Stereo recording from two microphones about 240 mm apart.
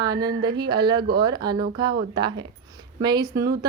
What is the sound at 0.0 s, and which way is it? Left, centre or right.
A woman's voice, centre.